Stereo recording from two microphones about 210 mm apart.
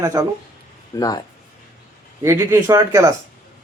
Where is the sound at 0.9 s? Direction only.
20° left (ahead or behind).